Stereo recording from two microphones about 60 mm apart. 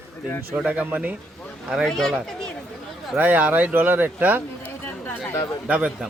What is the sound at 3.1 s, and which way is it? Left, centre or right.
Speech, right.